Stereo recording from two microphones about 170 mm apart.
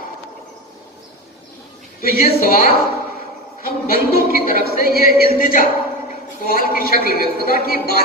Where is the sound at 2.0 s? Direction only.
60° left (ahead or behind).